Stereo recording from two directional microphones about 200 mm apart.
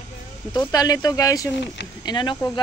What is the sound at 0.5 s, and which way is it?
Speech, 20° left (ahead or behind).